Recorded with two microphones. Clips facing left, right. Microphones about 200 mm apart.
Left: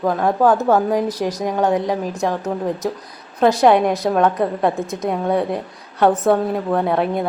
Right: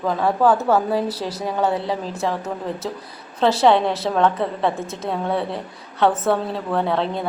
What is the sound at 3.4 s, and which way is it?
A woman's voice, 15° left (ahead or behind).